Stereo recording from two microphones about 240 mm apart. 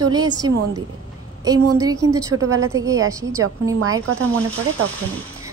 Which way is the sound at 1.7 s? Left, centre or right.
Centre.